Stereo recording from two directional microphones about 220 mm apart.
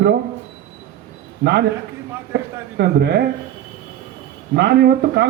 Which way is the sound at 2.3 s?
50° right (ahead or behind).